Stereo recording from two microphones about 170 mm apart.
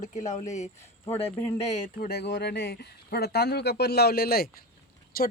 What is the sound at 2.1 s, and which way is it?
Speech, 80° left.